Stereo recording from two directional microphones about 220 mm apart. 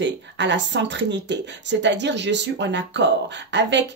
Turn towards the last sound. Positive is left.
turn(degrees=-55)  # may be behind; listen again after turning